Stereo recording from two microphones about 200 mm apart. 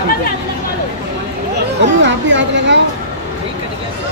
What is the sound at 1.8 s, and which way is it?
Chatter, 65° right (ahead or behind).